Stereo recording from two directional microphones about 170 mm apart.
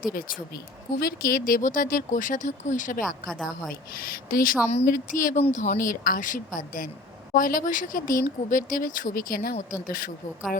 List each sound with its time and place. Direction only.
0.0 s speech: 55° left (ahead or behind)
3.2 s a woman's voice: 5° left (ahead or behind)
3.9 s speech: 60° left (ahead or behind)